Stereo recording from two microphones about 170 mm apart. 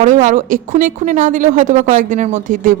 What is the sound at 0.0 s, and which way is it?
A woman's voice, 45° right (ahead or behind).